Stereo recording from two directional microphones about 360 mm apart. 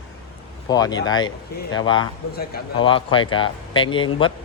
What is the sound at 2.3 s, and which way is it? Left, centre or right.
Speech, left.